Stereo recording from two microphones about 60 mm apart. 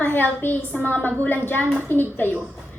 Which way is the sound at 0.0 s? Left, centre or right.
Left.